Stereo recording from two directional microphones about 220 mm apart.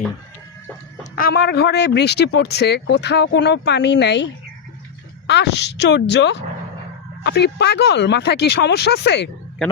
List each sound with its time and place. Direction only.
1.1 s speech: 45° left (ahead or behind)